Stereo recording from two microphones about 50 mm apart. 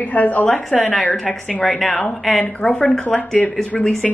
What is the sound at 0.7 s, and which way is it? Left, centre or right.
Speech, centre.